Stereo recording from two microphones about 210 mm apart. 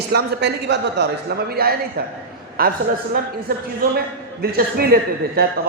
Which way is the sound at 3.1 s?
45° right (ahead or behind).